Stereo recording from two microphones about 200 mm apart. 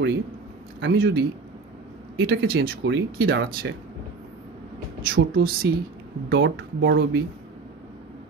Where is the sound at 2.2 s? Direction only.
75° right (ahead or behind).